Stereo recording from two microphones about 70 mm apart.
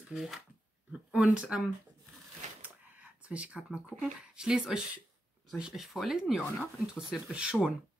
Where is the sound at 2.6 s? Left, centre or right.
Centre.